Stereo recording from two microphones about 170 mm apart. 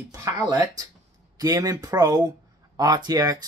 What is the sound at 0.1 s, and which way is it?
Speech, 20° right (ahead or behind).